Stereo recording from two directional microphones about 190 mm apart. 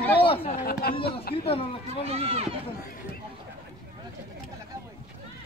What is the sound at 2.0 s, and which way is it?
Speech, 35° right (ahead or behind).